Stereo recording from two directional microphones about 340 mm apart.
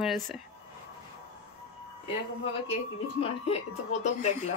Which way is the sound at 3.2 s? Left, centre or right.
Centre.